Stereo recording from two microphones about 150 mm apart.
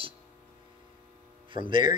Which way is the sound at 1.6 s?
30° right (ahead or behind).